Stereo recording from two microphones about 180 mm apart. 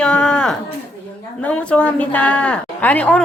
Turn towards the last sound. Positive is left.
turn(degrees=10)  # may be behind; listen again after turning